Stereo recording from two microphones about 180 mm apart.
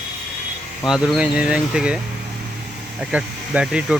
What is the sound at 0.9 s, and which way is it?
Speech, 5° right (ahead or behind).